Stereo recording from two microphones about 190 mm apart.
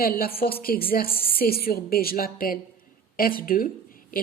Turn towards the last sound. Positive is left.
turn(degrees=45)  # may be behind; listen again after turning